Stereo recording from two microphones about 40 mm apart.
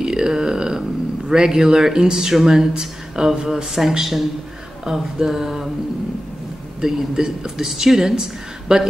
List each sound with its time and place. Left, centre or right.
0.0 s a sound: centre
1.3 s speech: centre
6.8 s speech: centre